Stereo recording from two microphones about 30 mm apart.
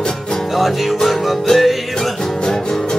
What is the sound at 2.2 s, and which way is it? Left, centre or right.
Music, centre.